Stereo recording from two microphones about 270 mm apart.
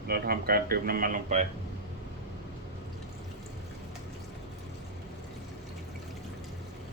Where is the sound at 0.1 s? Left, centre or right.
Right.